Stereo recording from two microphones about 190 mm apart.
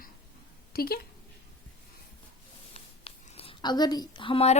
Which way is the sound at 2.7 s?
30° left (ahead or behind).